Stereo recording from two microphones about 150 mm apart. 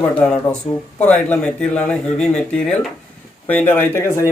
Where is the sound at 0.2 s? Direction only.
10° left (ahead or behind).